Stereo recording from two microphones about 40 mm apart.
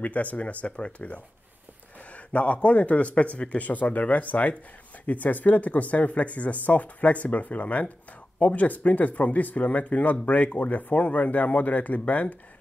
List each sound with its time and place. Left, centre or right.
0.0 s speech: left